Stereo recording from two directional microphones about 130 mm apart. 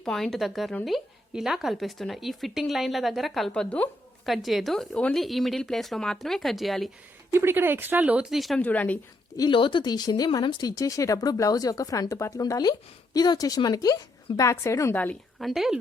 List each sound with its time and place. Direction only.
0.0 s a woman's voice: 5° left (ahead or behind)
7.3 s speech: 15° right (ahead or behind); by 8.6 s centre (ahead or behind)
8.6 s speech: 10° left (ahead or behind)
9.4 s speech: 40° left (ahead or behind); by 14.9 s 20° left (ahead or behind)
15.4 s a woman's voice: centre (ahead or behind)